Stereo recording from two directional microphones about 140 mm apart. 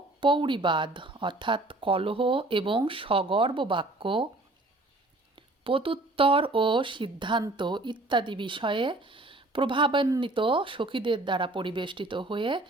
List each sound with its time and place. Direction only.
0.2 s speech: 35° right (ahead or behind)
5.6 s speech: 40° right (ahead or behind)